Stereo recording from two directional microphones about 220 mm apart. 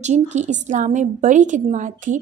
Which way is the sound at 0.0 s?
30° right (ahead or behind).